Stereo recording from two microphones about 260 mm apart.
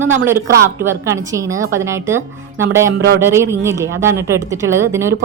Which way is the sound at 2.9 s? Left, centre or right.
Right.